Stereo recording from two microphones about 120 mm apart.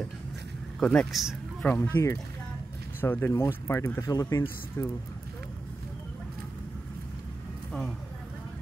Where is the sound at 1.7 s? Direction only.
20° left (ahead or behind).